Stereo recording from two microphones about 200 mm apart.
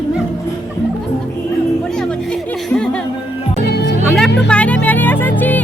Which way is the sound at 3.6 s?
55° left (ahead or behind).